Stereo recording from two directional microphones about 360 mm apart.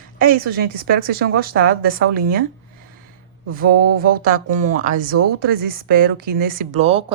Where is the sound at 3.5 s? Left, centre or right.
Right.